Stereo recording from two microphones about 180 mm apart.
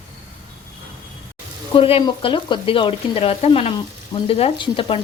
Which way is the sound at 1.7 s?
30° left (ahead or behind).